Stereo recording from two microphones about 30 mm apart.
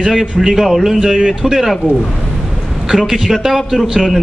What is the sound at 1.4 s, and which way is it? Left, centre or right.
Speech, centre.